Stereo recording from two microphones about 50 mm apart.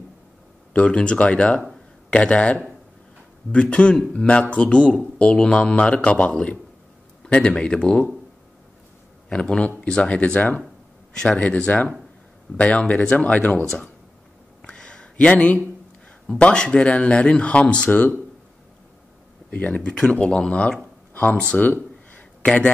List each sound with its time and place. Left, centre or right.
0.7 s a man's voice: centre
9.3 s a man's voice: centre
11.6 s speech: left
14.7 s a sound: centre
16.3 s speech: left
19.5 s speech: left
19.8 s speech: centre
21.1 s a sound: left